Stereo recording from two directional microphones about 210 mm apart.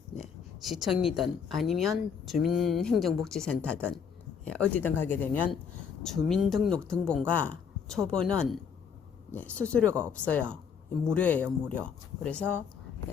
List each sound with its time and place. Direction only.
0.2 s speech: centre (ahead or behind)